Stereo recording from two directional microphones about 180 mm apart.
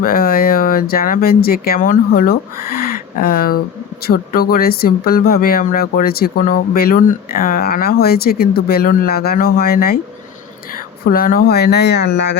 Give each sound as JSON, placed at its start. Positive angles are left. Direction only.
{"t": 0.0, "sound": "speech", "side_deg": 55}
{"t": 2.8, "sound": "a sound", "side_deg": 55}
{"t": 4.0, "sound": "speech", "side_deg": 55}
{"t": 11.1, "sound": "speech", "side_deg": 55}